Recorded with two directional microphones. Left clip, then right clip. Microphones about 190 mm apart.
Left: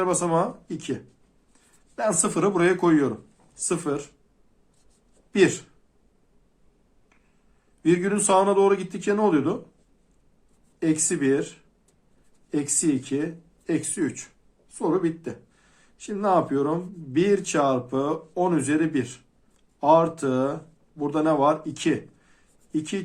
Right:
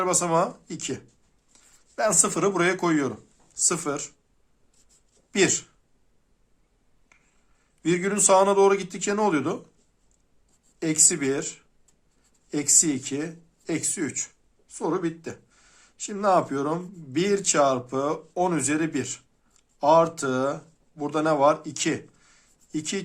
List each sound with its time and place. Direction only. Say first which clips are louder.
0.0 s speech: even; 35° right (ahead or behind)
5.3 s speech: left 2 dB; 35° right (ahead or behind)
7.8 s speech: left 2 dB; 35° right (ahead or behind)
10.8 s speech: even; 35° right (ahead or behind)